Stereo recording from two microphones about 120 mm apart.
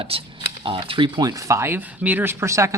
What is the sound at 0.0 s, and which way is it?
Speech, 50° right (ahead or behind).